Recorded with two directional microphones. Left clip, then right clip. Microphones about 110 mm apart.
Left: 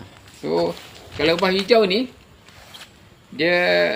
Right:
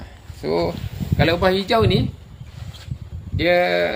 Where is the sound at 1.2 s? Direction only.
55° right (ahead or behind).